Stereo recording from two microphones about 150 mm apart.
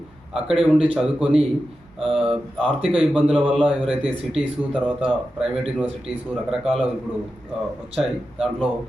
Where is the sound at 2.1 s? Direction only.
40° right (ahead or behind).